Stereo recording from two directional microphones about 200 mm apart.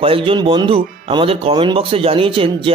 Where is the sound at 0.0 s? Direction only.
25° right (ahead or behind).